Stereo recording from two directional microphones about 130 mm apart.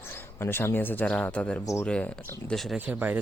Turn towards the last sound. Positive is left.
turn(degrees=-15)  # may be behind; listen again after turning